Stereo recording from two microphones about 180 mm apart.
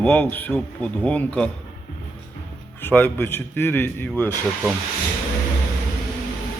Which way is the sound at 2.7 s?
10° left (ahead or behind).